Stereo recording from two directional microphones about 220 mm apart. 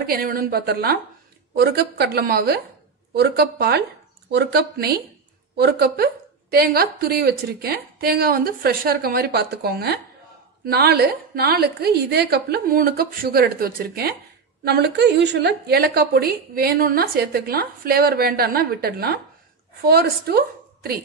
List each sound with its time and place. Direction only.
0.0 s a woman's voice: 40° right (ahead or behind)